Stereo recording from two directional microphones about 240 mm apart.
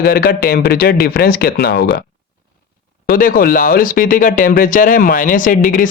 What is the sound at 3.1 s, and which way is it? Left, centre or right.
Speech, left.